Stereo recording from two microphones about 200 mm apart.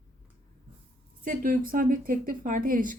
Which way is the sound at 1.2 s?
45° right (ahead or behind).